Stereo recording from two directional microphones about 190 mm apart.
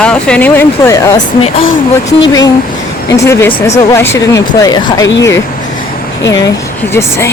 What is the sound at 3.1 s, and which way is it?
Speech, 15° left (ahead or behind).